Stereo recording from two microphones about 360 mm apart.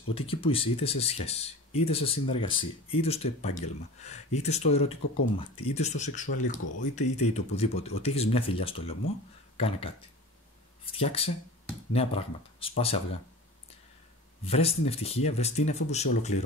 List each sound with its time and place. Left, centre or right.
0.1 s speech: centre
10.9 s speech: centre
14.4 s speech: centre